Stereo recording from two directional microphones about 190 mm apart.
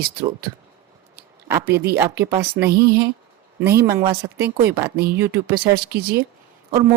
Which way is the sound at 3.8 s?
15° right (ahead or behind).